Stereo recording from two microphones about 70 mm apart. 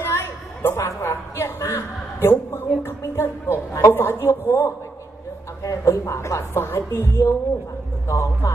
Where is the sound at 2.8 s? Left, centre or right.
Left.